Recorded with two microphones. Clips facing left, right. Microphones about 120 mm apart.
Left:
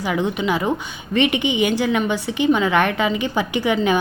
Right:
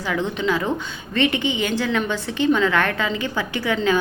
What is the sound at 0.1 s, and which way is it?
A woman's voice, 15° left (ahead or behind).